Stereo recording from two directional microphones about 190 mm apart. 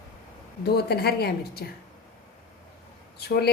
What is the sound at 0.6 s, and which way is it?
A woman's voice, 55° left (ahead or behind).